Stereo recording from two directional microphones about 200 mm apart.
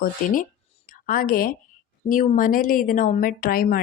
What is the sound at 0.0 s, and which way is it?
A woman's voice, 45° left (ahead or behind).